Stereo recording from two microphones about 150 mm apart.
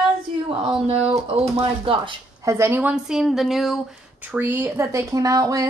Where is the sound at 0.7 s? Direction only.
40° right (ahead or behind).